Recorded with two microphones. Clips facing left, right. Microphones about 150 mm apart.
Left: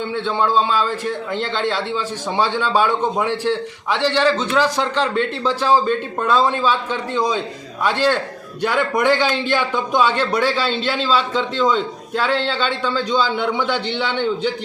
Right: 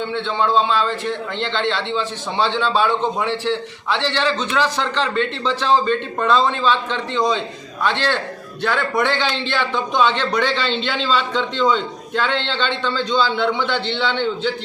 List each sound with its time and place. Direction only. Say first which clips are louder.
0.1 s a man's voice: left 1 dB; 10° left (ahead or behind)